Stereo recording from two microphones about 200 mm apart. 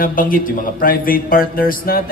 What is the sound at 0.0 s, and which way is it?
A man's voice, 45° left (ahead or behind).